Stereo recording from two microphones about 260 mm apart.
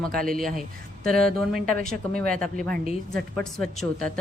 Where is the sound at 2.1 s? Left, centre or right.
Right.